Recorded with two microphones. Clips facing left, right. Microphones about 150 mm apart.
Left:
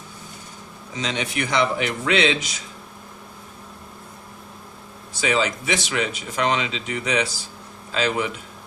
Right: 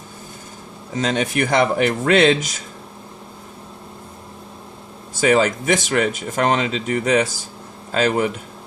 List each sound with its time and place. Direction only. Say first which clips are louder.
0.9 s speech: right 6 dB; 45° right (ahead or behind)
5.2 s speech: right 6 dB; 50° right (ahead or behind)